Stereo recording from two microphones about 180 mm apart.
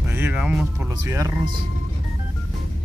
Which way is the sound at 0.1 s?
10° right (ahead or behind).